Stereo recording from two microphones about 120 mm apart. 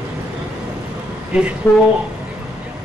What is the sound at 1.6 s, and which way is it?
Speech, 20° left (ahead or behind).